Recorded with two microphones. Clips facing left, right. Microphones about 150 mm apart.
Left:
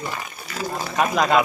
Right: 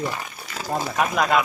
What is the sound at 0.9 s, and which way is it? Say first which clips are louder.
Speech: left 3 dB; centre (ahead or behind).